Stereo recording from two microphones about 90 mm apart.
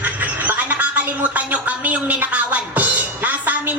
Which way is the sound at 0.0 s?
20° right (ahead or behind).